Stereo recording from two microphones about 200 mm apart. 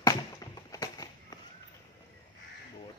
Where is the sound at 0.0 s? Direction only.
15° left (ahead or behind).